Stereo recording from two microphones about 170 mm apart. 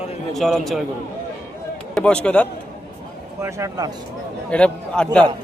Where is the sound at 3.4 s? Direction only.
15° right (ahead or behind).